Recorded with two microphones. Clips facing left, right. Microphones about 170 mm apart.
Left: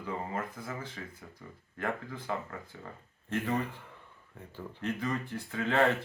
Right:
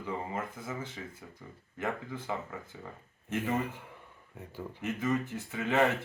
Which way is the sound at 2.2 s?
10° right (ahead or behind).